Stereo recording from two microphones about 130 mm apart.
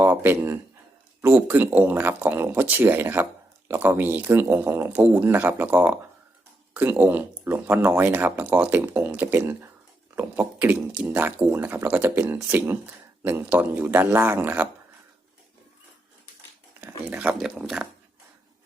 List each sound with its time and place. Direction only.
0.0 s speech: 15° right (ahead or behind)
16.8 s speech: 10° right (ahead or behind)